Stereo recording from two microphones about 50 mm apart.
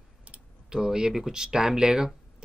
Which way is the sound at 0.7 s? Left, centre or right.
Centre.